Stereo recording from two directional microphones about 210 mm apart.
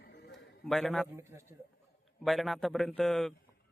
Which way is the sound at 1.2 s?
10° right (ahead or behind).